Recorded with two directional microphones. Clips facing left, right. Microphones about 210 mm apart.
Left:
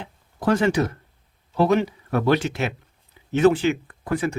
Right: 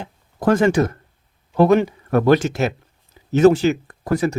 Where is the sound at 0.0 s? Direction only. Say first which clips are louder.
Right 4 dB; 50° right (ahead or behind).